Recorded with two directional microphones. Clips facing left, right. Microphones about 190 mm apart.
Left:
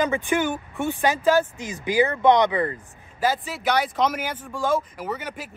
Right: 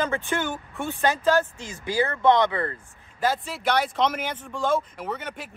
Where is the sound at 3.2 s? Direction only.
5° left (ahead or behind).